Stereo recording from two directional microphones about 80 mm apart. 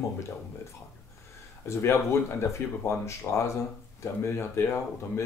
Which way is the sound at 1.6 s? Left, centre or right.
Left.